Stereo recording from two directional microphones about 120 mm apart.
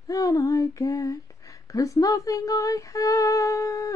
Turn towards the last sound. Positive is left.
turn(degrees=30)  # may be behind; listen again after turning